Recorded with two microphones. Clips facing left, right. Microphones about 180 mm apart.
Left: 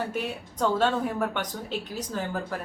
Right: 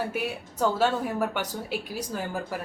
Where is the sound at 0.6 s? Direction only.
5° right (ahead or behind).